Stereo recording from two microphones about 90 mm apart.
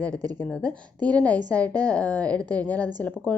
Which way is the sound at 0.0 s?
15° left (ahead or behind).